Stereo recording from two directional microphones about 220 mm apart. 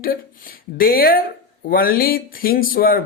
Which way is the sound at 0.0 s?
40° left (ahead or behind).